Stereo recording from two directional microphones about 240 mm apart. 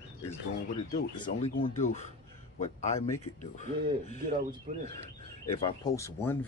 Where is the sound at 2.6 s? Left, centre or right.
Left.